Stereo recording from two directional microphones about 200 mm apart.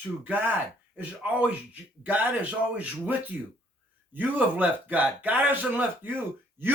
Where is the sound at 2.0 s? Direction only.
10° right (ahead or behind).